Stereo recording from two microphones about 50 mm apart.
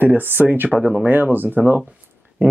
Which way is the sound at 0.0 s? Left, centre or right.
Right.